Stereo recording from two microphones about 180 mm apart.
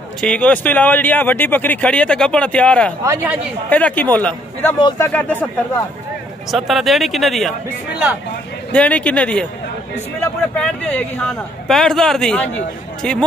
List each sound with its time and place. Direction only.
0.2 s speech: 5° left (ahead or behind)
3.0 s speech: 15° right (ahead or behind)
3.7 s speech: 10° left (ahead or behind)
4.7 s speech: 25° left (ahead or behind)
5.0 s speech: 10° left (ahead or behind)
6.5 s a man's voice: centre (ahead or behind)
8.7 s a man's voice: 5° left (ahead or behind)